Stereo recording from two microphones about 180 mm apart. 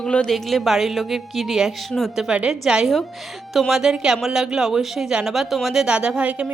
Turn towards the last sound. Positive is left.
turn(degrees=-5)  # may be behind; listen again after turning